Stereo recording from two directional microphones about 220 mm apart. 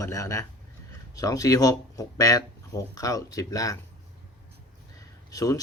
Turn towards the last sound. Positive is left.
turn(degrees=15)  # may be behind; listen again after turning